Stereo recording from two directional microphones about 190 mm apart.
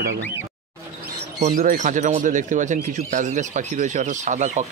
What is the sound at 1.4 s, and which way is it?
Speech, 40° right (ahead or behind).